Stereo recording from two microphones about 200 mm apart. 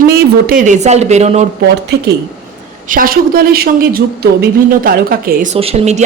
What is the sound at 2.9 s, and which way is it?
A woman's voice, 45° right (ahead or behind).